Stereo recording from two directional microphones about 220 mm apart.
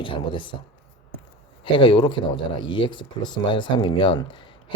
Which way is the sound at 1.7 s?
20° left (ahead or behind).